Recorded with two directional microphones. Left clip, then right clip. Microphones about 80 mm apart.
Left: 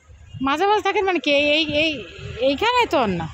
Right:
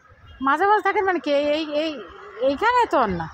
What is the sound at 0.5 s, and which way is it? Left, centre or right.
A woman's voice, left.